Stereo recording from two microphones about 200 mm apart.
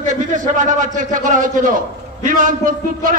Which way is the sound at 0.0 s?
40° right (ahead or behind).